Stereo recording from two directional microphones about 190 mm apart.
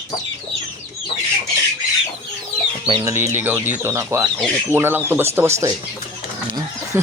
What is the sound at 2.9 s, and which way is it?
Speech, 25° right (ahead or behind).